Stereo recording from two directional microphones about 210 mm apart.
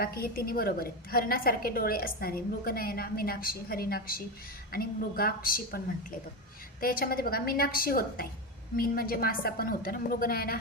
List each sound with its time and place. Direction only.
0.0 s a woman's voice: 45° left (ahead or behind)